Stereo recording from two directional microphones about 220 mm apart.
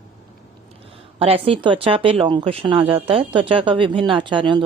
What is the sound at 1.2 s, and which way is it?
Speech, 25° right (ahead or behind).